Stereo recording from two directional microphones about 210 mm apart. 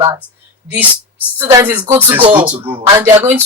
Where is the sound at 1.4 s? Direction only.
10° right (ahead or behind).